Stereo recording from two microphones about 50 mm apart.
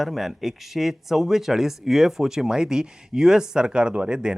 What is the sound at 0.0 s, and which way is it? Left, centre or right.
Speech, centre.